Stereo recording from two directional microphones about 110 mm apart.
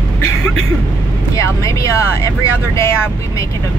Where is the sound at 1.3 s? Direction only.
30° left (ahead or behind).